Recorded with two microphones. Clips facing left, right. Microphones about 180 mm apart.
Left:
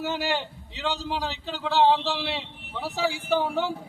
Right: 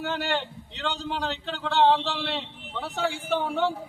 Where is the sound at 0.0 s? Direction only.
5° left (ahead or behind).